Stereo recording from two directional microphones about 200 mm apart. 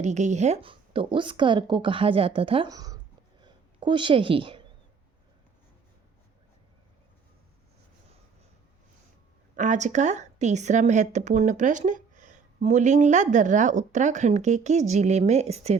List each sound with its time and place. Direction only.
0.0 s a woman's voice: 35° right (ahead or behind); by 3.0 s 20° right (ahead or behind)
3.4 s a sound: 25° right (ahead or behind)
9.6 s speech: 35° right (ahead or behind)